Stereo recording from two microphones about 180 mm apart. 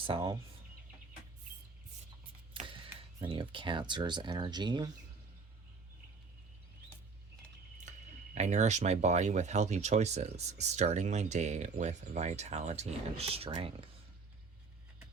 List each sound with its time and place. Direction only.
0.0 s speech: 25° right (ahead or behind)
2.5 s speech: 30° right (ahead or behind)
8.4 s speech: 40° right (ahead or behind)